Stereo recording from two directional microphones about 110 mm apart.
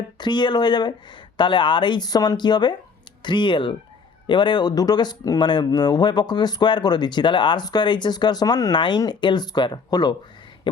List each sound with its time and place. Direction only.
0.2 s speech: 45° left (ahead or behind)